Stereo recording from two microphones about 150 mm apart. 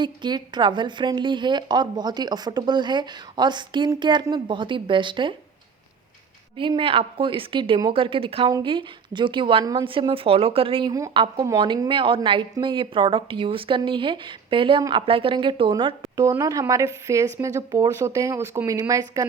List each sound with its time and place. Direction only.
0.0 s speech: 30° right (ahead or behind)
6.6 s speech: 35° right (ahead or behind)